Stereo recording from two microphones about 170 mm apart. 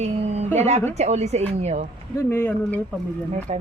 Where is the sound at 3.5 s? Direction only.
40° right (ahead or behind).